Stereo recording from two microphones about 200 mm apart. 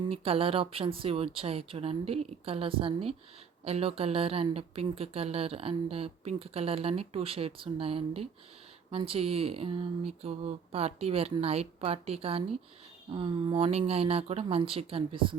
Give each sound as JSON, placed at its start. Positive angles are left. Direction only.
{"t": 0.0, "sound": "a woman's voice", "side_deg": -30}